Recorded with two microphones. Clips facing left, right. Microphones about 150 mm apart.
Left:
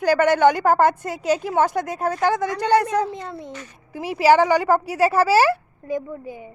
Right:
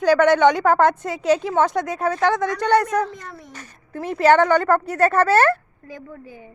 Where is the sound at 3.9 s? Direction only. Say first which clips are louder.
Even; 10° left (ahead or behind).